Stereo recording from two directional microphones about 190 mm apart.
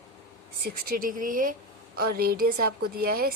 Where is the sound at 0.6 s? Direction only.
45° right (ahead or behind).